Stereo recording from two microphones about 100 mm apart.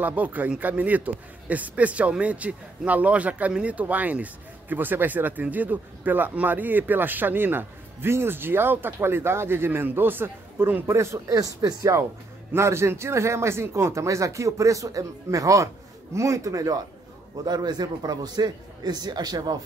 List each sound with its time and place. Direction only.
0.0 s a man's voice: 15° right (ahead or behind); by 19.5 s 45° right (ahead or behind)